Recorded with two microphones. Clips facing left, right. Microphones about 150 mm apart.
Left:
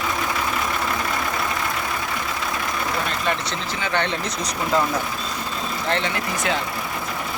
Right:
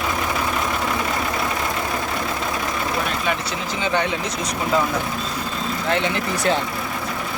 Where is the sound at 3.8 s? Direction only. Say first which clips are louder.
Right 2 dB; 10° right (ahead or behind).